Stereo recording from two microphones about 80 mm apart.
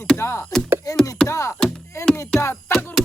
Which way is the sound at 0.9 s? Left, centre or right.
Left.